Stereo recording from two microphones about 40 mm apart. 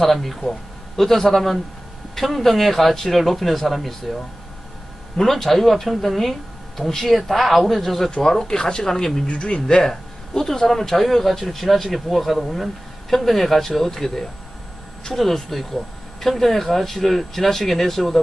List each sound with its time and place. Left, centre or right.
0.0 s a man's voice: centre
9.2 s speech: left
9.6 s a man's voice: centre